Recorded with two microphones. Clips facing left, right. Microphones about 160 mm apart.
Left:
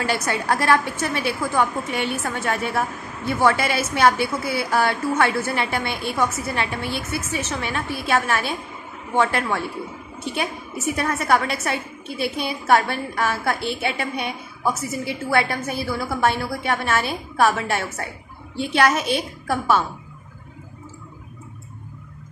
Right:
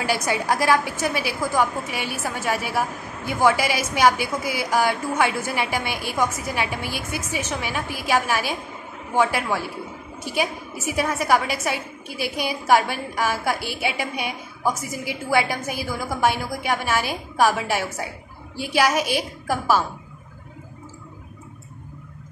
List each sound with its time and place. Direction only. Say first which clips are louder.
0.0 s a woman's voice: even; 10° right (ahead or behind)